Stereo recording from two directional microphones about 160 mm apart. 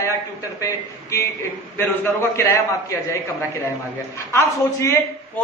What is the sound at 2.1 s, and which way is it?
Speech, 15° left (ahead or behind).